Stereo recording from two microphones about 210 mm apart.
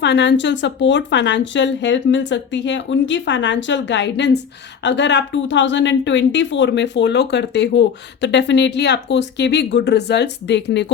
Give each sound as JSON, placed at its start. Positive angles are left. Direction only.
{"t": 0.0, "sound": "a woman's voice", "side_deg": 55}